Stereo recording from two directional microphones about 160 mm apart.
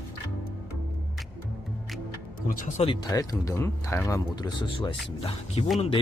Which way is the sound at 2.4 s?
55° left (ahead or behind).